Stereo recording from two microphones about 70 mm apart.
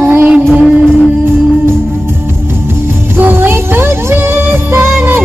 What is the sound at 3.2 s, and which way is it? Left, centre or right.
Music, right.